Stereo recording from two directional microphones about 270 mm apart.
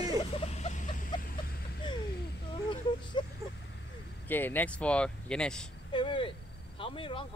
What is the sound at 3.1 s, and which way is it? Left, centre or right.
Vehicle, centre.